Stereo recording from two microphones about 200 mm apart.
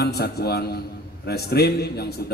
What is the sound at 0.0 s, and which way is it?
A man's voice, 55° left (ahead or behind).